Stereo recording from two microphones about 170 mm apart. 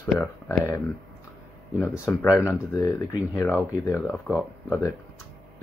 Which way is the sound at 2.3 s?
15° left (ahead or behind).